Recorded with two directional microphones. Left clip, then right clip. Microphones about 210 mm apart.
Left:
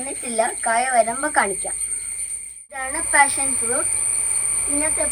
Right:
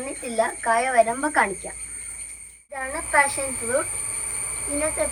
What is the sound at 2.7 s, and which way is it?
Speech, 15° right (ahead or behind).